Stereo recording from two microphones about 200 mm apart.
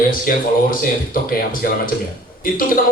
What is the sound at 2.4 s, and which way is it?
Speech, 45° left (ahead or behind).